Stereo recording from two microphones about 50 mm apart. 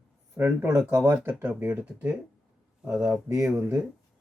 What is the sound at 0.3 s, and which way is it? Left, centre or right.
Speech, right.